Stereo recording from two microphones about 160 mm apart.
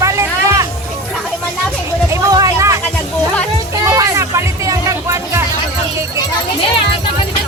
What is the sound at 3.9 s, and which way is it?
Music, 20° right (ahead or behind).